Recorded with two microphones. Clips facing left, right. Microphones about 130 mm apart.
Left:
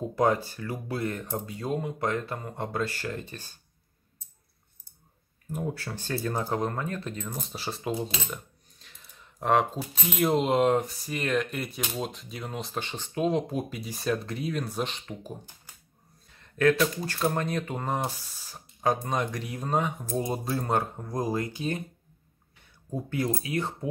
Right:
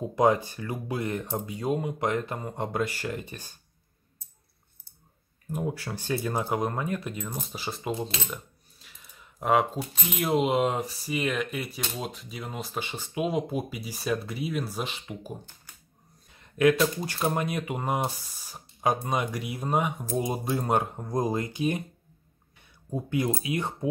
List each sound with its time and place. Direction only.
0.1 s speech: 20° right (ahead or behind)
5.5 s speech: 15° right (ahead or behind)
7.2 s speech: centre (ahead or behind)
16.3 s a sound: 15° right (ahead or behind)
17.0 s speech: 15° right (ahead or behind)
22.8 s speech: 15° right (ahead or behind)